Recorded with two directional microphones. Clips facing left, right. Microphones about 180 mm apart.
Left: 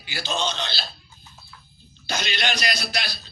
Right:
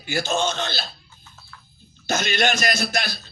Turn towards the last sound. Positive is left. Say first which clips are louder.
# right 4 dB
turn(degrees=-50)  # may be behind; listen again after turning